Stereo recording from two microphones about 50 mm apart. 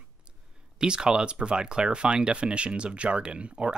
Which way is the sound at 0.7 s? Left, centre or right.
Centre.